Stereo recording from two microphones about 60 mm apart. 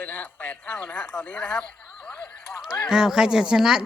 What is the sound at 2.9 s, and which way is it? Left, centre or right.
Speech, centre.